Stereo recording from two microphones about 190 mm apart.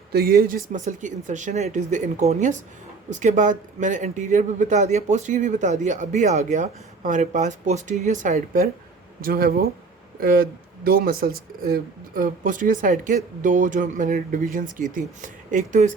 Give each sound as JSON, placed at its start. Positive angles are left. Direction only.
{"t": 0.1, "sound": "speech", "side_deg": -55}